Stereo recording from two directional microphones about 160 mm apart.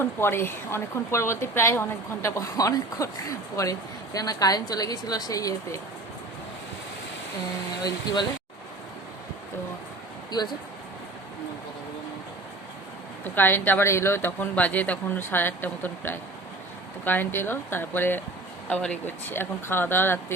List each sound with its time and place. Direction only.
0.0 s a woman's voice: 15° left (ahead or behind)
7.9 s a woman's voice: 25° left (ahead or behind)
10.3 s a woman's voice: 25° left (ahead or behind)
13.2 s speech: 10° left (ahead or behind)